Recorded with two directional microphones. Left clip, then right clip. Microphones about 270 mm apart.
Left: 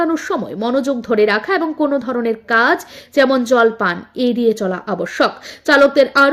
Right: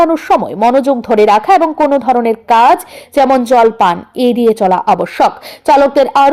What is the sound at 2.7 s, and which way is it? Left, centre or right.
Speech, centre.